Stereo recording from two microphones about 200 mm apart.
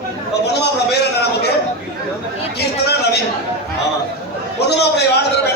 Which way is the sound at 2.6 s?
55° left (ahead or behind).